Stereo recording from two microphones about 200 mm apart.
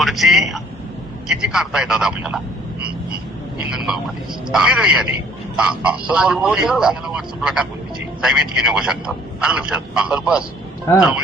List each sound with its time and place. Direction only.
0.0 s speech: centre (ahead or behind)
3.7 s speech: 5° right (ahead or behind)
10.9 s speech: 15° left (ahead or behind)